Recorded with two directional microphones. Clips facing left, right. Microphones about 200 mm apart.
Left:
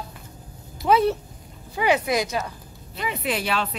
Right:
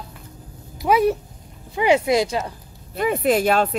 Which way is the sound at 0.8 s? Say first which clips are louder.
Right 2 dB; 15° right (ahead or behind).